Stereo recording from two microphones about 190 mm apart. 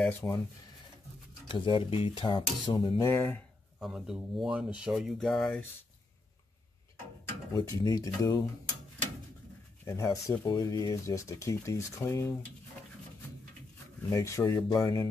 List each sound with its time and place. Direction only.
0.0 s speech: 15° left (ahead or behind)
1.5 s speech: 25° left (ahead or behind)
3.8 s speech: 5° right (ahead or behind)
7.5 s speech: 20° left (ahead or behind)
9.8 s speech: 15° left (ahead or behind)
14.1 s speech: 15° left (ahead or behind)